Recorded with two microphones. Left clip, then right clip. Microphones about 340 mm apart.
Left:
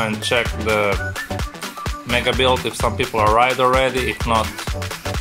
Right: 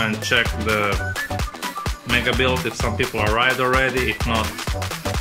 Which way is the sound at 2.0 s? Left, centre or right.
Centre.